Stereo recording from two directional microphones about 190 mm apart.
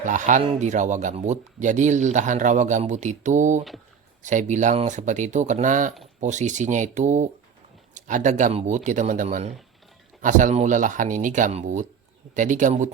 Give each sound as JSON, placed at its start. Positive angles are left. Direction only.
{"t": 0.0, "sound": "speech", "side_deg": -40}